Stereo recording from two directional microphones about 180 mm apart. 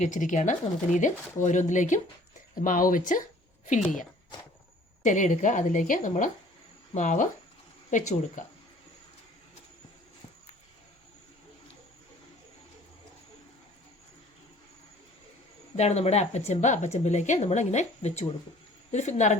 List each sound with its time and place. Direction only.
0.0 s speech: 45° left (ahead or behind)
5.0 s speech: 45° left (ahead or behind)
15.7 s speech: 40° left (ahead or behind)